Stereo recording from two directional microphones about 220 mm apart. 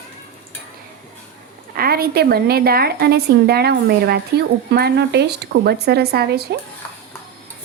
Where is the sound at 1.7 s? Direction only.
45° right (ahead or behind).